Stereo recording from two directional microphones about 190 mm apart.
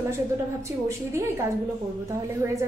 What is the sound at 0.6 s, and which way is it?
Speech, 15° right (ahead or behind).